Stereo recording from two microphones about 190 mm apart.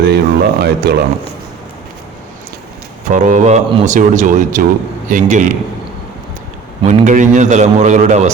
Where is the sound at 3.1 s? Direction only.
40° right (ahead or behind).